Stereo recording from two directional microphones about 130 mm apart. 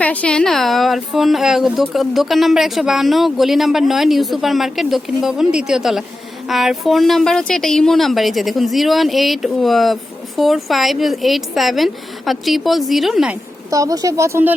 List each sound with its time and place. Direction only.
0.0 s speech: 10° left (ahead or behind)
13.7 s speech: 25° right (ahead or behind)